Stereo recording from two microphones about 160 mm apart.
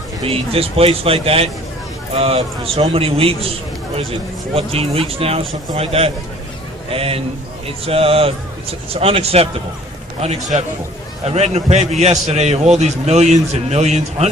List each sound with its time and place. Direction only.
0.3 s a man's voice: 35° right (ahead or behind)
4.5 s a man's voice: 35° right (ahead or behind)